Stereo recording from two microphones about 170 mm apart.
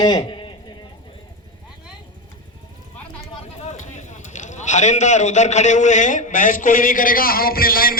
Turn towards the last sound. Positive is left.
turn(degrees=60)  # may be behind; listen again after turning